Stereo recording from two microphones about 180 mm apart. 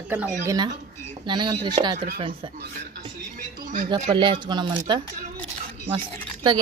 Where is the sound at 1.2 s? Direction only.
25° right (ahead or behind).